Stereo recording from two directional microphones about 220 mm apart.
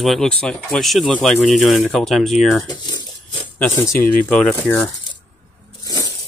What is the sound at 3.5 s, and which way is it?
Speech, 15° left (ahead or behind).